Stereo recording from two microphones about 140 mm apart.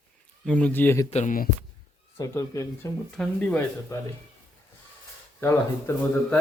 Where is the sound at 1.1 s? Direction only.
55° left (ahead or behind).